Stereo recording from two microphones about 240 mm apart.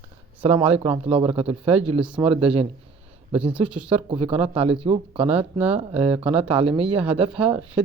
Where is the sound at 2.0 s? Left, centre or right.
Centre.